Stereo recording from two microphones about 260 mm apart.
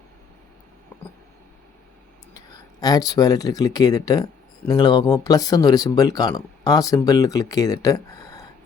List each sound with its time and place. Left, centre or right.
2.8 s speech: centre